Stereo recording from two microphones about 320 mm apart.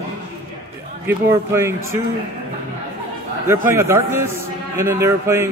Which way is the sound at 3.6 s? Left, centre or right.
Centre.